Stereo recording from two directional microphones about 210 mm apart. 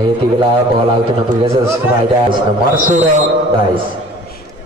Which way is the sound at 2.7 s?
40° right (ahead or behind).